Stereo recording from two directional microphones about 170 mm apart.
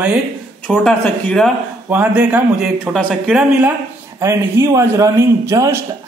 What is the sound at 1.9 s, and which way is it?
A man's voice, 10° right (ahead or behind).